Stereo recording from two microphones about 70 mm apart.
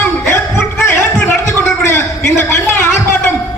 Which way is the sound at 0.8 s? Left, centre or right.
Left.